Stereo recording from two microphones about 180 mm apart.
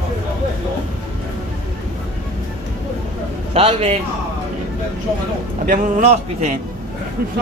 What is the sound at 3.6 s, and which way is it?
Speech, 35° right (ahead or behind).